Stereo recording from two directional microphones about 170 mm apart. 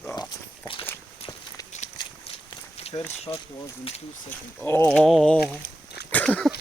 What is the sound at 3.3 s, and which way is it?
Speech, 25° left (ahead or behind).